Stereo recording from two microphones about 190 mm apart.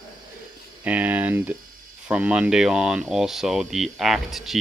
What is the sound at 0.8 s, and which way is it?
Speech, 10° right (ahead or behind).